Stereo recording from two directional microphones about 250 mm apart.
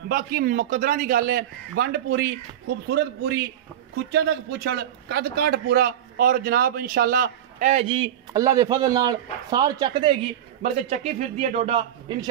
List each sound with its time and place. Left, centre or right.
0.1 s a man's voice: right